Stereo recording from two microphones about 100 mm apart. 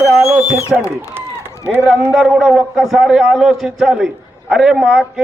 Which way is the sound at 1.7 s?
5° right (ahead or behind).